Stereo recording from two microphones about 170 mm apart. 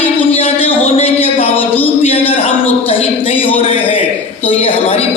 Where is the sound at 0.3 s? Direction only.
35° left (ahead or behind).